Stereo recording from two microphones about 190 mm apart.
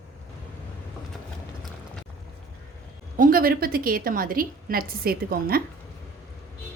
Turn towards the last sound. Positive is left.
turn(degrees=-50)  # may be behind; listen again after turning